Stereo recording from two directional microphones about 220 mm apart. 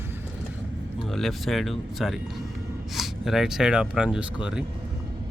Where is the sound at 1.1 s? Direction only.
Centre (ahead or behind).